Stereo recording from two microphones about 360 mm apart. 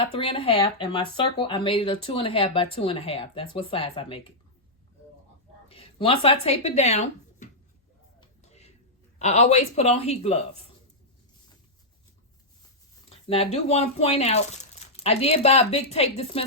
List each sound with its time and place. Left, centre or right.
0.0 s speech: centre
5.6 s speech: centre
8.2 s a sound: centre
9.1 s speech: centre
13.1 s speech: centre